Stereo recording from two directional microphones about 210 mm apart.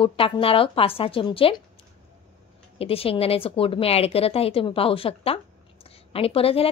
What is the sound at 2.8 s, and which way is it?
Speech, 25° left (ahead or behind).